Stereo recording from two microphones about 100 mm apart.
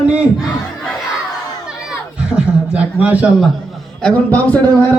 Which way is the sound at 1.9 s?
10° right (ahead or behind).